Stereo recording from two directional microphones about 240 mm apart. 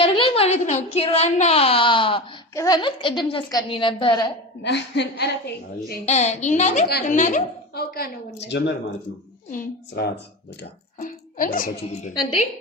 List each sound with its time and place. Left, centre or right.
0.0 s speech: left
4.6 s a woman's voice: left
5.9 s a woman's voice: left
12.1 s speech: left